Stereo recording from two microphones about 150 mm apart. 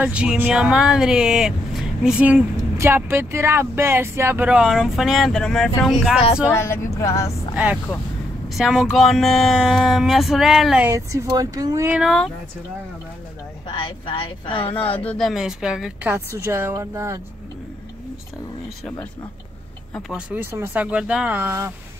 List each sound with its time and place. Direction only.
0.0 s speech: 5° right (ahead or behind)
6.5 s speech: 20° left (ahead or behind)
7.5 s speech: 10° right (ahead or behind)
10.9 s speech: 20° right (ahead or behind)
11.9 s speech: centre (ahead or behind)
13.7 s speech: 35° left (ahead or behind)
15.0 s speech: centre (ahead or behind)
16.1 s speech: 15° right (ahead or behind)
20.1 s speech: 5° right (ahead or behind)